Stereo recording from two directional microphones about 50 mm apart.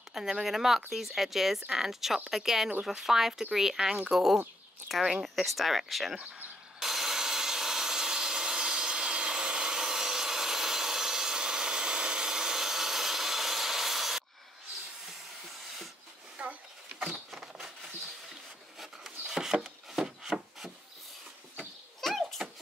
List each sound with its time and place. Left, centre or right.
0.1 s speech: centre
6.8 s wood: centre
16.3 s rodents: right
18.8 s wood: centre
22.1 s a sound: centre